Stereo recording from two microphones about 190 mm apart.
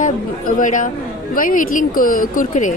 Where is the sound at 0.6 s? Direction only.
45° left (ahead or behind).